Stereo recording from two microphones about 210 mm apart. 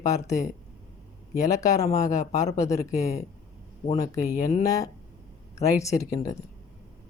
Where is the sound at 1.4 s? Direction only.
15° left (ahead or behind).